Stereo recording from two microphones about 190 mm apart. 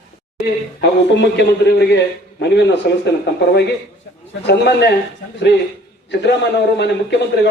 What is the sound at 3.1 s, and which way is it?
A man's voice, 60° left (ahead or behind).